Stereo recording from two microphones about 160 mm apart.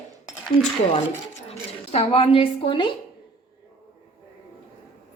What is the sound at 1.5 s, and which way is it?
Speech, 40° left (ahead or behind).